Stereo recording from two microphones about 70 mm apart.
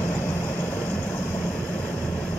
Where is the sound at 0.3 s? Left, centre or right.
Left.